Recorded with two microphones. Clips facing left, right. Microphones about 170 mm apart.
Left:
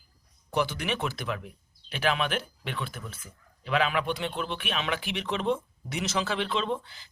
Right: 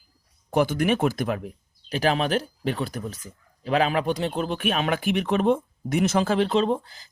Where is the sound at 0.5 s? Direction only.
50° right (ahead or behind).